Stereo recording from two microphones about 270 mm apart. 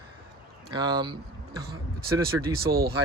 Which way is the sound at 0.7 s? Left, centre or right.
Centre.